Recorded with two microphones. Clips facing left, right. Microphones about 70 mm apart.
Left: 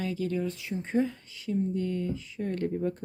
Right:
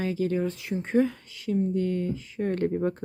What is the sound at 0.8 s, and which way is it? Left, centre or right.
Speech, right.